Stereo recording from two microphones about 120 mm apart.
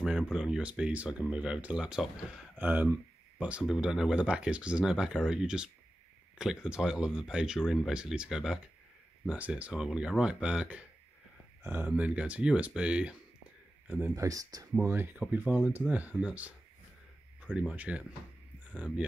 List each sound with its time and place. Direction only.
0.3 s speech: 10° right (ahead or behind)
14.1 s speech: 30° right (ahead or behind)
14.7 s speech: 15° right (ahead or behind)
18.7 s speech: 5° left (ahead or behind)